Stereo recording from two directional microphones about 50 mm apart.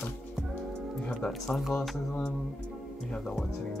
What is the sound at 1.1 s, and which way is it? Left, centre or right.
Speech, centre.